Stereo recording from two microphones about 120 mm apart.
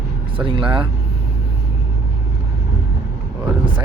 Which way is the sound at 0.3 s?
45° right (ahead or behind).